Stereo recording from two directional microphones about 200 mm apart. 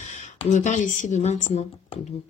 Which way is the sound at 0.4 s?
35° left (ahead or behind).